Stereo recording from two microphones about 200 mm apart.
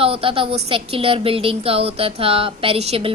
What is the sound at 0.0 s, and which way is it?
A woman's voice, 30° right (ahead or behind).